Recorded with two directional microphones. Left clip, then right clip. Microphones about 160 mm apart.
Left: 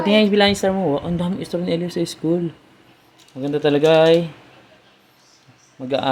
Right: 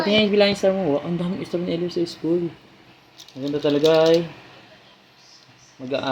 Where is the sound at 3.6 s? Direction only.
40° left (ahead or behind).